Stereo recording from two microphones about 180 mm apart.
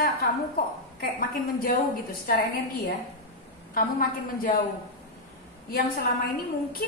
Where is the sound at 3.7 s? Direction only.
55° left (ahead or behind).